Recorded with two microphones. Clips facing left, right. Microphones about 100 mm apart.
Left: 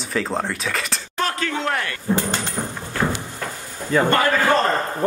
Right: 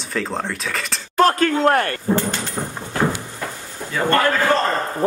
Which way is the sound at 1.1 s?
45° right (ahead or behind).